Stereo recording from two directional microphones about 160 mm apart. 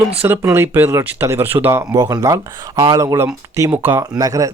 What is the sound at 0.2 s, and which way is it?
Speech, 15° right (ahead or behind).